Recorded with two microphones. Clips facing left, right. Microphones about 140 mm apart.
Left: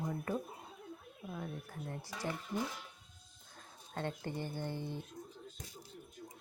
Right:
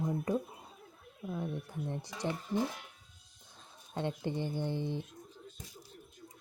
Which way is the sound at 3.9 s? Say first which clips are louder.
Right 4 dB; 20° right (ahead or behind).